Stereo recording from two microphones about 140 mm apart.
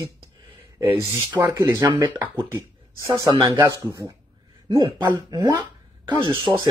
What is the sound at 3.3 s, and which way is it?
Speech, 30° right (ahead or behind).